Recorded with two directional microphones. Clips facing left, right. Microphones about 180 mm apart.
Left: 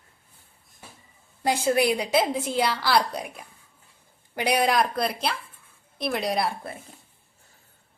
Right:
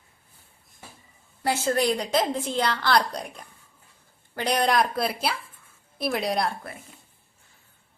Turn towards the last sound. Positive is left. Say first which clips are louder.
# even
turn(degrees=0)  # may be behind; listen again after turning